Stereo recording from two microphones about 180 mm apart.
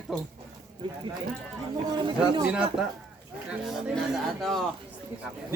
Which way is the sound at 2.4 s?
5° right (ahead or behind).